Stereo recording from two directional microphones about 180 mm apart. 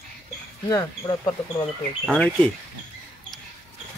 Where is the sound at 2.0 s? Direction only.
5° left (ahead or behind).